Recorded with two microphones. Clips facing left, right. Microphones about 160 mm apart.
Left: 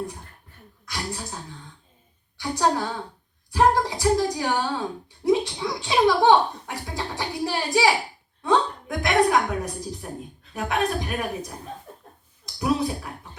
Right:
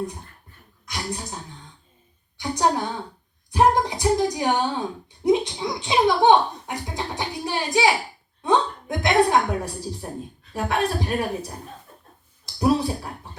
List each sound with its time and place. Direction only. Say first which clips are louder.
0.9 s a woman's voice: right 1 dB; 20° right (ahead or behind)
2.4 s a woman's voice: right 1 dB; 20° right (ahead or behind)
12.5 s speech: right 3 dB; 30° right (ahead or behind)